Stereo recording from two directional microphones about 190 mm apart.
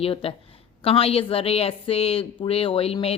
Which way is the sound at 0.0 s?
30° left (ahead or behind).